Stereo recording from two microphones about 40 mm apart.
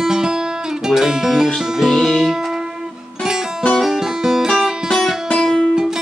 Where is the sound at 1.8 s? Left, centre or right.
Centre.